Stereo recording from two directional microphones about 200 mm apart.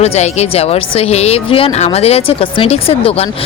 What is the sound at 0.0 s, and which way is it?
Speech, 30° left (ahead or behind).